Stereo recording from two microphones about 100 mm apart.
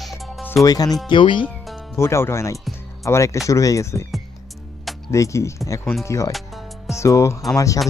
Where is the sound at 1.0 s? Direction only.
55° left (ahead or behind).